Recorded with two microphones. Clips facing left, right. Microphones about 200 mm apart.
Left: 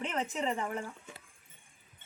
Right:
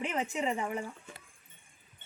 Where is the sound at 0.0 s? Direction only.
15° right (ahead or behind).